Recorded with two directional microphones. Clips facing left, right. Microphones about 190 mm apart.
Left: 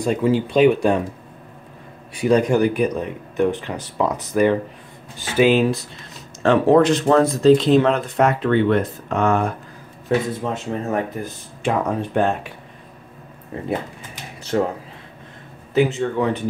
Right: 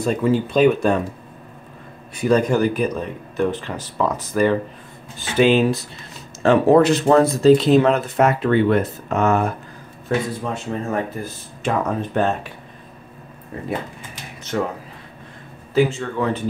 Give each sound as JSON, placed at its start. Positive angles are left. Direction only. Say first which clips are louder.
{"t": 0.0, "sound": "speech", "louder": "even", "side_deg": 15}
{"t": 2.1, "sound": "speech", "louder": "left 1 dB", "side_deg": 15}
{"t": 5.3, "sound": "speech", "louder": "even", "side_deg": 5}
{"t": 10.0, "sound": "speech", "louder": "left 2 dB", "side_deg": 20}
{"t": 14.4, "sound": "speech", "louder": "left 3 dB", "side_deg": 30}
{"t": 15.7, "sound": "speech", "louder": "left 1 dB", "side_deg": 20}